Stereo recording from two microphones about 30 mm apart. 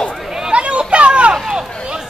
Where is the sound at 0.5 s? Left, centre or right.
Right.